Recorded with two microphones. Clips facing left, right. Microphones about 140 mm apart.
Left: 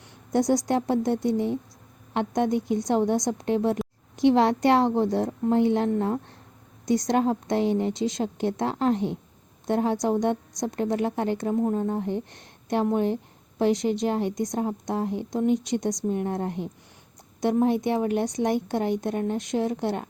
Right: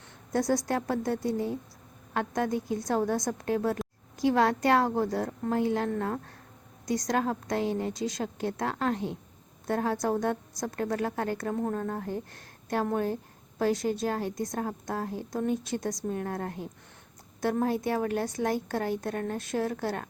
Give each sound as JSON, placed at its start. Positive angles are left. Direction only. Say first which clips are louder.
{"t": 0.3, "sound": "a woman's voice", "louder": "left 5 dB", "side_deg": 20}